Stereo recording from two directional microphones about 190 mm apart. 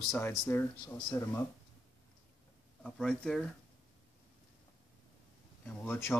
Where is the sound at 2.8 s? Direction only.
Centre (ahead or behind).